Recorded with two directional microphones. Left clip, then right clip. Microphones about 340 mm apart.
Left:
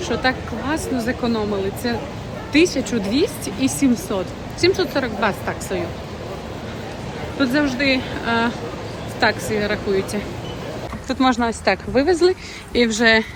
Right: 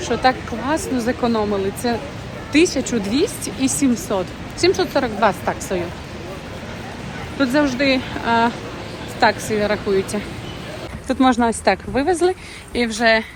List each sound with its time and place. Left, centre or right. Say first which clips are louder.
0.0 s speech: right 3 dB; centre
7.3 s speech: right 2 dB; centre